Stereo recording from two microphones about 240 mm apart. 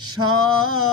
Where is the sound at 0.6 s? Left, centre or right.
Left.